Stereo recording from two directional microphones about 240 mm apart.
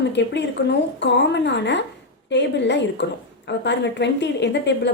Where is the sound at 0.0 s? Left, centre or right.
Left.